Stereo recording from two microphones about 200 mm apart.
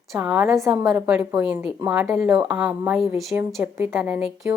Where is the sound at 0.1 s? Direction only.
10° right (ahead or behind).